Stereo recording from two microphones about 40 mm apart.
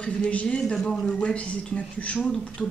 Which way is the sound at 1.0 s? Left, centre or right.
Left.